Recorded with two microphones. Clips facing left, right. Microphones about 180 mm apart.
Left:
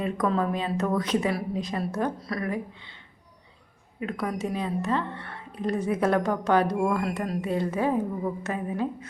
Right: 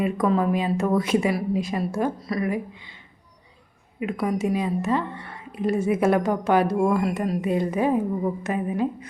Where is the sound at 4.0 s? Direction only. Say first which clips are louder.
Right 5 dB; 10° right (ahead or behind).